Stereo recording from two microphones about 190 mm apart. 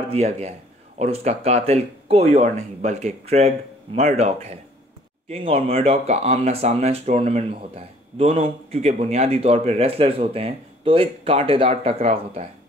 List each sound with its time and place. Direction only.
0.1 s speech: 35° right (ahead or behind)